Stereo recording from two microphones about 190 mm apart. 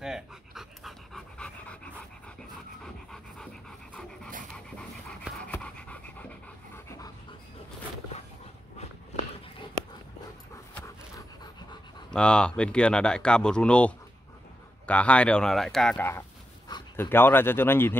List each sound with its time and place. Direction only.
0.0 s dog: centre (ahead or behind)
2.8 s pant: 5° left (ahead or behind)
4.7 s pant: 5° left (ahead or behind)
10.7 s dog: 20° left (ahead or behind)
12.1 s speech: 5° left (ahead or behind)